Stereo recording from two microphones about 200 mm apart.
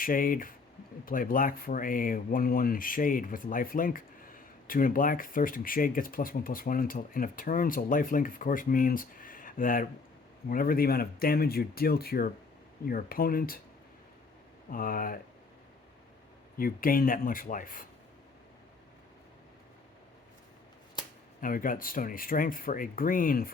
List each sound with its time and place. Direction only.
0.0 s speech: 45° left (ahead or behind)
14.7 s speech: 45° left (ahead or behind)
16.6 s speech: 45° left (ahead or behind)
21.4 s speech: 45° left (ahead or behind)